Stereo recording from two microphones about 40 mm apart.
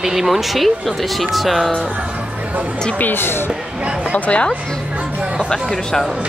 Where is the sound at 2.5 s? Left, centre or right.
Right.